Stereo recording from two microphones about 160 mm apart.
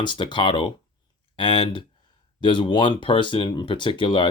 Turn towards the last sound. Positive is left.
turn(degrees=30)  # may be behind; listen again after turning